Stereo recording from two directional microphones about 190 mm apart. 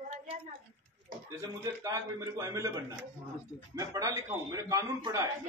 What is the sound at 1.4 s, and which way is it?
A man's voice, 20° right (ahead or behind).